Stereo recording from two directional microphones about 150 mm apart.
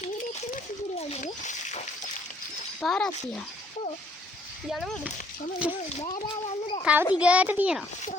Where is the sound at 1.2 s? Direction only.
50° left (ahead or behind).